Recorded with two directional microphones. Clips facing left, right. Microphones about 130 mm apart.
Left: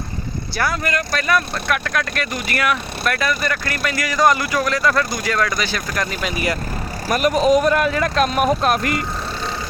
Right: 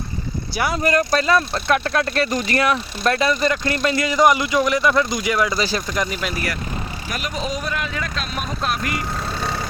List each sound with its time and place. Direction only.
0.5 s speech: 15° right (ahead or behind)
0.8 s speech: 35° right (ahead or behind); by 5.5 s 20° right (ahead or behind)
5.5 s speech: 30° right (ahead or behind)
5.9 s speech: 20° right (ahead or behind)
7.1 s speech: 55° left (ahead or behind)